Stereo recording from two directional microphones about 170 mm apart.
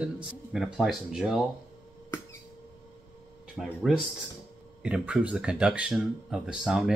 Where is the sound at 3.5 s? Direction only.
Centre (ahead or behind).